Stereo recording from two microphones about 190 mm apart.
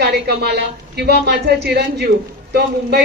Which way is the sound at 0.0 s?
60° right (ahead or behind).